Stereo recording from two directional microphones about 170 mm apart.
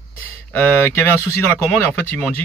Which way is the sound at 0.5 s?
10° left (ahead or behind).